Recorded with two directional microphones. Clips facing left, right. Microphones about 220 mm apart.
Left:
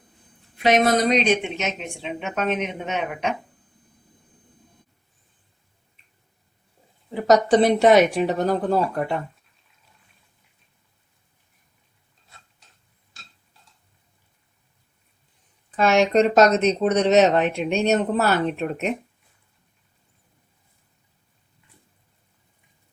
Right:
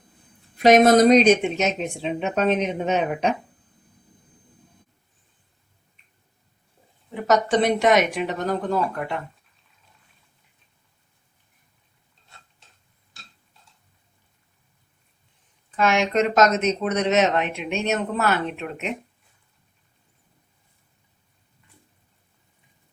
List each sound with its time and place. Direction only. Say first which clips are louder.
0.6 s a woman's voice: right 5 dB; 45° right (ahead or behind)
7.1 s speech: left 4 dB; 35° left (ahead or behind)
15.7 s speech: left 3 dB; 35° left (ahead or behind)